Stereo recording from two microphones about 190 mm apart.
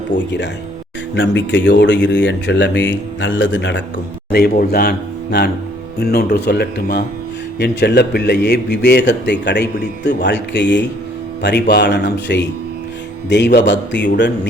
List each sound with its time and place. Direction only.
0.1 s speech: 70° left (ahead or behind)
4.3 s a man's voice: 60° left (ahead or behind)